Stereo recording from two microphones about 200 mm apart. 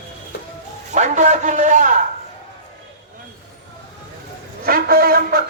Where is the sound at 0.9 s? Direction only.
40° right (ahead or behind).